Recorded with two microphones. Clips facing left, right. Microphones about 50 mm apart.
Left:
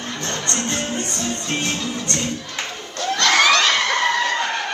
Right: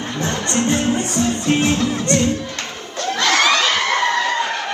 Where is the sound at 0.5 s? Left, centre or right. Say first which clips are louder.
Right 8 dB; centre.